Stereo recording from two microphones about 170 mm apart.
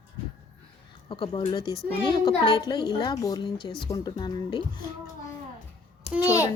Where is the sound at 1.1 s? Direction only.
30° left (ahead or behind).